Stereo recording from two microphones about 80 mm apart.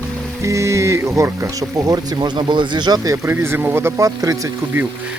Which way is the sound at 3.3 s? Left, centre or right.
Right.